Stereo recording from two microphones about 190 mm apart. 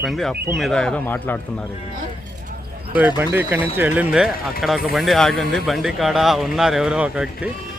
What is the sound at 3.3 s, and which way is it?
Speech, 10° right (ahead or behind).